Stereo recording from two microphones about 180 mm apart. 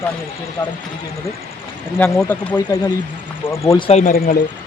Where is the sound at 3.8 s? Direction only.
30° left (ahead or behind).